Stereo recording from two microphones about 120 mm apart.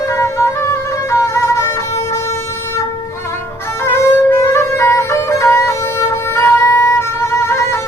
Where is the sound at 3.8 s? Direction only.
20° left (ahead or behind).